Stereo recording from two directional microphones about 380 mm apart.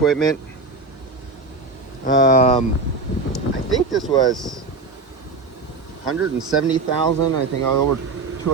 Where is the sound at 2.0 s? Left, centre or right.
Left.